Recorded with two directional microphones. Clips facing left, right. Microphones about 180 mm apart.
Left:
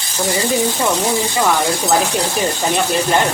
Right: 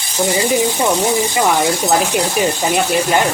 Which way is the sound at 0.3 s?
15° right (ahead or behind).